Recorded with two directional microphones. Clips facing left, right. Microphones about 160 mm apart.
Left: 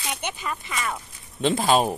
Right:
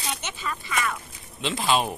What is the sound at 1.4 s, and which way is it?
Speech, 50° left (ahead or behind).